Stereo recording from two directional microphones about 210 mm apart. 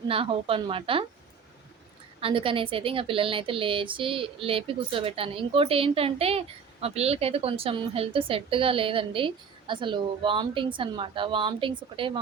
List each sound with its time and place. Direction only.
0.1 s a woman's voice: 25° right (ahead or behind)
2.2 s a woman's voice: 25° right (ahead or behind)